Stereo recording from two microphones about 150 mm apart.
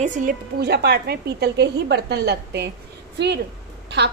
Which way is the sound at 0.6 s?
90° right.